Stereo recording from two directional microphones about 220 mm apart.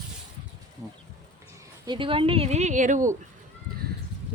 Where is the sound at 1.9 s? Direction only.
25° right (ahead or behind).